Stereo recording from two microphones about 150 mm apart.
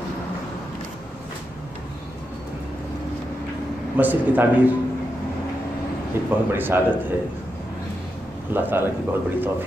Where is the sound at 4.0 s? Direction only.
10° right (ahead or behind).